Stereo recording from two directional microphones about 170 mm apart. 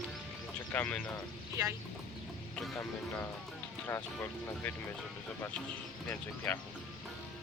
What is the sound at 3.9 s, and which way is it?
Speech, 15° left (ahead or behind).